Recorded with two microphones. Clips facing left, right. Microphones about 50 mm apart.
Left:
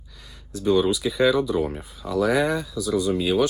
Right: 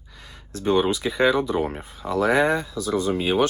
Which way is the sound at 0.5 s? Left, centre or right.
Right.